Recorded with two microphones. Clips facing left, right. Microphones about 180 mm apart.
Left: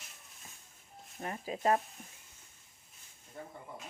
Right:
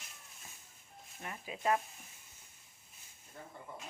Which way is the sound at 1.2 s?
40° left (ahead or behind).